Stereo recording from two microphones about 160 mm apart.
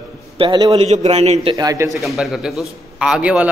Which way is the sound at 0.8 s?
40° right (ahead or behind).